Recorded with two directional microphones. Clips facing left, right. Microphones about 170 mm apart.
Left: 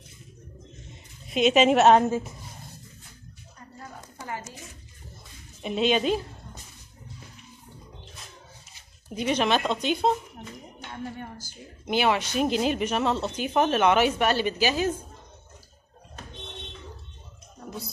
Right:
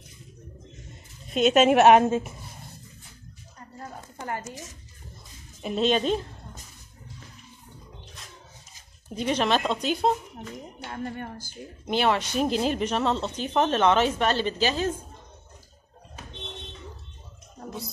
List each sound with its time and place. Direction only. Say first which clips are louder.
1.3 s speech: right 1 dB; centre (ahead or behind)
1.8 s a woman's voice: right 3 dB; 15° right (ahead or behind)
2.0 s speech: right 2 dB; 25° right (ahead or behind)
5.6 s speech: even; centre (ahead or behind)
9.1 s speech: even; 5° left (ahead or behind)
10.9 s a woman's voice: right 2 dB; 55° right (ahead or behind)
11.8 s speech: even; 5° left (ahead or behind)